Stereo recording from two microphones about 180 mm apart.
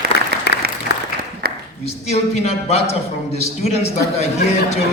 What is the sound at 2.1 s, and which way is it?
Speech, 35° left (ahead or behind).